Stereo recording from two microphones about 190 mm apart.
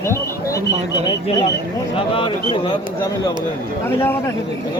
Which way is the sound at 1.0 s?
30° left (ahead or behind).